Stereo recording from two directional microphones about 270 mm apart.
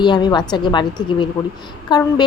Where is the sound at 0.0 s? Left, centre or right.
Centre.